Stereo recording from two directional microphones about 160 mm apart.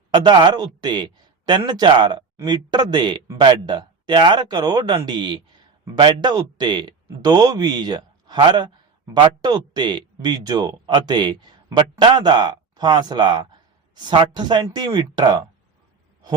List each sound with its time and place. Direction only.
0.1 s speech: 30° right (ahead or behind)